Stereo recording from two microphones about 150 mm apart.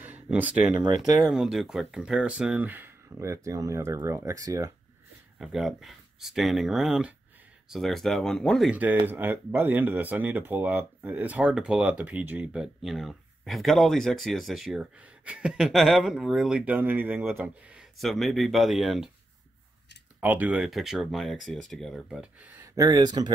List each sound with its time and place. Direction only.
0.0 s speech: 10° right (ahead or behind)
5.4 s speech: centre (ahead or behind)
9.0 s speech: 15° right (ahead or behind)
20.2 s speech: 10° right (ahead or behind)
22.8 s speech: 25° right (ahead or behind)